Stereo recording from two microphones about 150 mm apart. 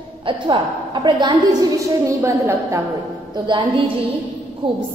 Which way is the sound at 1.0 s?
30° right (ahead or behind).